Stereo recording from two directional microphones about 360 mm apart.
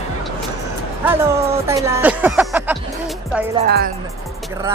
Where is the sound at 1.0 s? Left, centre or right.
Centre.